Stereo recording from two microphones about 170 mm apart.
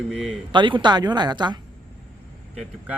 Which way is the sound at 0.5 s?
30° right (ahead or behind).